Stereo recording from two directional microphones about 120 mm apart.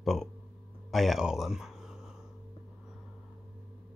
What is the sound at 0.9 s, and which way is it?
Speech, centre (ahead or behind).